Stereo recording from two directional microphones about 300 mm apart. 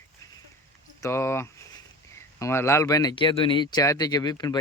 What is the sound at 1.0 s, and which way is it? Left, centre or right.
Speech, centre.